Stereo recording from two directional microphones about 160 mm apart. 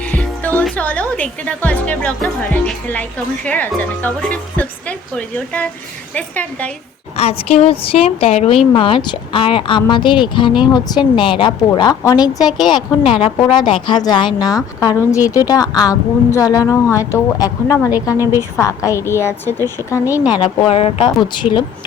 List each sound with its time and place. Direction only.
0.0 s speech: 10° left (ahead or behind)
7.2 s a woman's voice: 40° left (ahead or behind); by 18.2 s 20° left (ahead or behind)
18.2 s a woman's voice: 15° right (ahead or behind)
18.6 s speech: 20° left (ahead or behind)
20.3 s speech: 30° left (ahead or behind)